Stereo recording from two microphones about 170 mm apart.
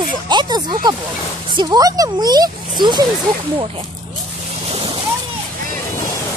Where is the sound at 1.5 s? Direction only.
20° right (ahead or behind).